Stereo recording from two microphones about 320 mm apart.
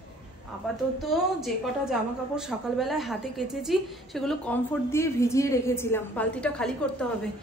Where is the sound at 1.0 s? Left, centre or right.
Centre.